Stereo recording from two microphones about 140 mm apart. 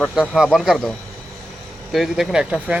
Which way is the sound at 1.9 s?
Centre (ahead or behind).